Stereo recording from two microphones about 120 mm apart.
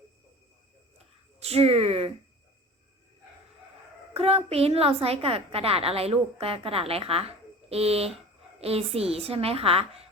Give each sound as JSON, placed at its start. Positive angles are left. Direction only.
{"t": 1.4, "sound": "speech", "side_deg": -55}
{"t": 4.1, "sound": "a woman's voice", "side_deg": -55}